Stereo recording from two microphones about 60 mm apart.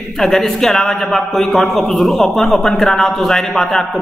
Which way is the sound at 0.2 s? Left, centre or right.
Centre.